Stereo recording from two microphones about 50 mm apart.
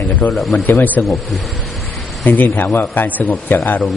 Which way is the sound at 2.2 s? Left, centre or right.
Left.